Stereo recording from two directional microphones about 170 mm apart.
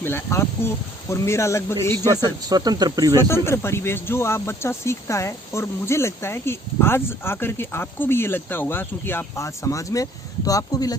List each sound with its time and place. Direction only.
0.0 s speech: 15° left (ahead or behind)
2.0 s speech: 25° right (ahead or behind)
3.2 s speech: 15° left (ahead or behind)